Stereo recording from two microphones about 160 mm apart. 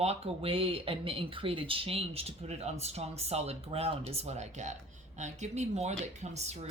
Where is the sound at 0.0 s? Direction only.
40° right (ahead or behind).